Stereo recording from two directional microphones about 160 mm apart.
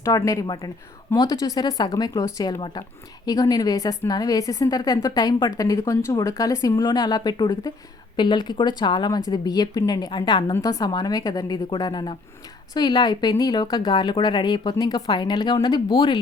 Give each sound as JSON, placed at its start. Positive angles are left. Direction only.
{"t": 0.0, "sound": "a woman's voice", "side_deg": 20}